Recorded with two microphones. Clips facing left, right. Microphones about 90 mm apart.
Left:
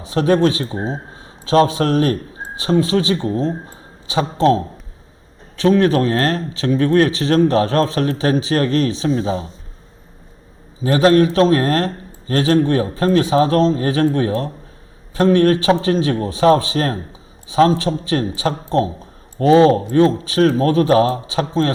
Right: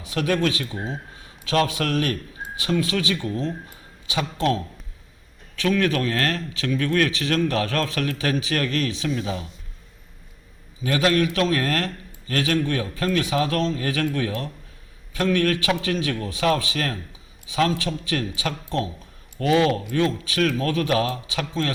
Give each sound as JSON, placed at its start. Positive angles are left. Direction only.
{"t": 0.0, "sound": "a man's voice", "side_deg": 30}
{"t": 10.8, "sound": "a man's voice", "side_deg": 35}